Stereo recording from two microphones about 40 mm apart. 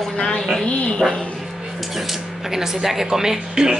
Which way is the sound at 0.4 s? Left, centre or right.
Centre.